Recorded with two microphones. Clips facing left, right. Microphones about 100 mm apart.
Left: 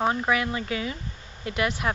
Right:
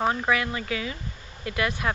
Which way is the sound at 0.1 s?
15° left (ahead or behind).